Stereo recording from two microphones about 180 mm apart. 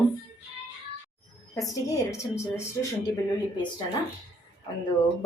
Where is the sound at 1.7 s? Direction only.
15° left (ahead or behind).